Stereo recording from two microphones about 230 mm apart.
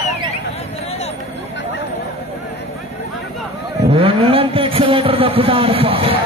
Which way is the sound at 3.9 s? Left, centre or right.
Right.